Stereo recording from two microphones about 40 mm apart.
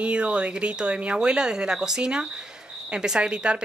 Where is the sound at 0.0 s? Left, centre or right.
Right.